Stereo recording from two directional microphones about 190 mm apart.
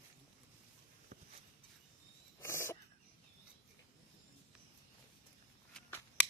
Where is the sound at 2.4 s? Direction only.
15° left (ahead or behind).